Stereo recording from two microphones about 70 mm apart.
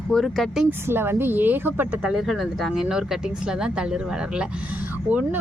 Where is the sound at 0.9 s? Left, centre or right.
Right.